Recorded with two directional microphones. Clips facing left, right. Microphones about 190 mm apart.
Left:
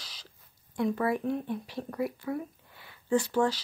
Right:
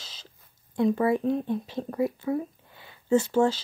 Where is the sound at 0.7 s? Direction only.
25° right (ahead or behind).